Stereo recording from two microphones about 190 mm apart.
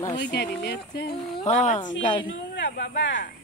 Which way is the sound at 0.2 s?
60° left (ahead or behind).